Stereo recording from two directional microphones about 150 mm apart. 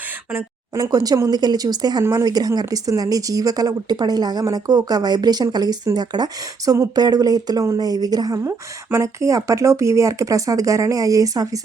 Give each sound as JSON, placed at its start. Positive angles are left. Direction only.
{"t": 0.3, "sound": "speech", "side_deg": -25}